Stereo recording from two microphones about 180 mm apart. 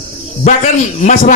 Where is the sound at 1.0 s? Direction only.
45° left (ahead or behind).